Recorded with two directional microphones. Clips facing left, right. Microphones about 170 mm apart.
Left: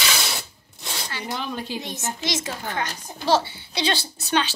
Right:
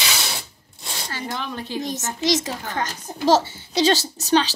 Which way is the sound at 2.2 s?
40° right (ahead or behind).